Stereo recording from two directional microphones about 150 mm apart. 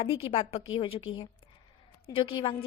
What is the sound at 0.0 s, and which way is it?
A woman's voice, 35° left (ahead or behind).